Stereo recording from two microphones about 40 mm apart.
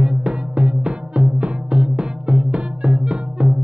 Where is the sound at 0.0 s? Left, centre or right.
Centre.